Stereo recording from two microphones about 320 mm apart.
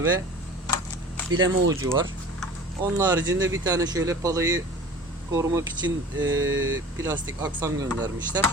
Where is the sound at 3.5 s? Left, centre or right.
Centre.